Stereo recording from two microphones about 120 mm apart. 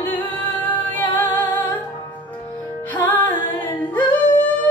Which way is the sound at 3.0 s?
15° left (ahead or behind).